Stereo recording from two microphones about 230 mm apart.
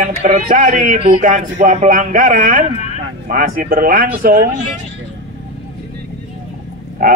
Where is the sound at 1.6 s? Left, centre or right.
Right.